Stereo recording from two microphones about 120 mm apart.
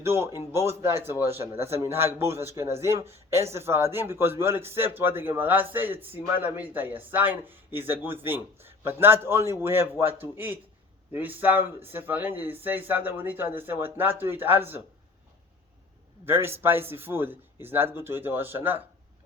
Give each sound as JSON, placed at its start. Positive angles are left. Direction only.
{"t": 0.0, "sound": "a man's voice", "side_deg": -20}
{"t": 16.2, "sound": "speech", "side_deg": -20}